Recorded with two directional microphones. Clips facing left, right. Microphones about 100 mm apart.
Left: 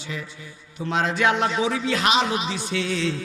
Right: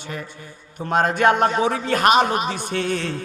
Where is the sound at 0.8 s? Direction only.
50° right (ahead or behind).